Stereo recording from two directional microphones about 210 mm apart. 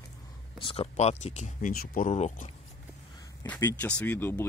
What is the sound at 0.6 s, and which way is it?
Speech, 25° left (ahead or behind).